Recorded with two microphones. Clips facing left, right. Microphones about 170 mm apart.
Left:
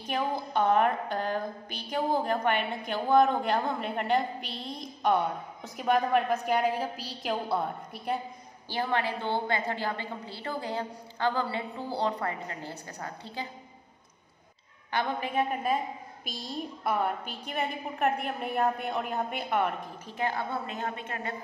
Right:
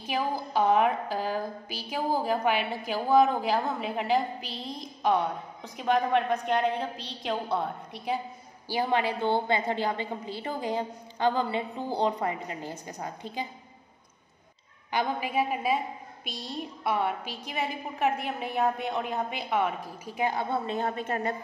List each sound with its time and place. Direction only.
0.0 s a woman's voice: 5° right (ahead or behind)
8.6 s a woman's voice: 15° right (ahead or behind)
14.9 s a woman's voice: 10° right (ahead or behind)
16.8 s a woman's voice: centre (ahead or behind)
20.1 s a woman's voice: 15° right (ahead or behind)
20.6 s a woman's voice: 35° right (ahead or behind)